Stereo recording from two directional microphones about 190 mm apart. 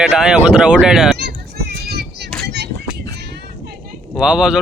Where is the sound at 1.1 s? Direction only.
55° right (ahead or behind).